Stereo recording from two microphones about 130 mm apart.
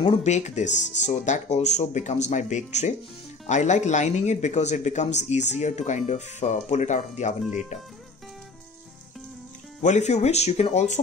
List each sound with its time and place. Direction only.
0.2 s speech: 60° left (ahead or behind)
9.8 s speech: 65° left (ahead or behind)